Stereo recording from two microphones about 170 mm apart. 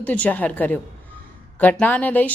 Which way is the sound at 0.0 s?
10° left (ahead or behind).